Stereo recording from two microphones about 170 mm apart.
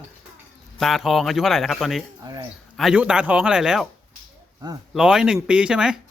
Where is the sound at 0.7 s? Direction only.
Centre (ahead or behind).